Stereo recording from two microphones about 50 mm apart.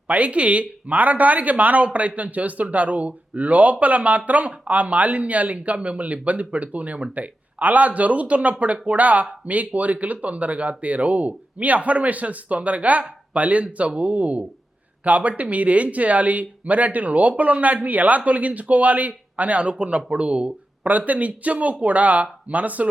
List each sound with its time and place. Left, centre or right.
0.1 s speech: right